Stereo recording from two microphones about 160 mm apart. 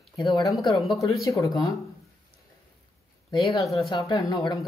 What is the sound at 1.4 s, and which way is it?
Speech, 20° left (ahead or behind).